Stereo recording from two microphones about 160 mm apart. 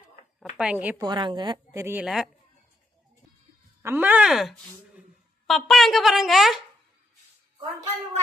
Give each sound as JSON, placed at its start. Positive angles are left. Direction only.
{"t": 0.5, "sound": "a woman's voice", "side_deg": -10}
{"t": 0.9, "sound": "a woman's voice", "side_deg": -30}
{"t": 1.7, "sound": "a woman's voice", "side_deg": -15}
{"t": 2.0, "sound": "speech", "side_deg": 0}
{"t": 3.8, "sound": "speech", "side_deg": -10}